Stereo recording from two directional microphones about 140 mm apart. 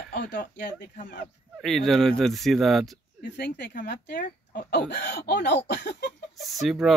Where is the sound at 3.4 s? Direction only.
90° left.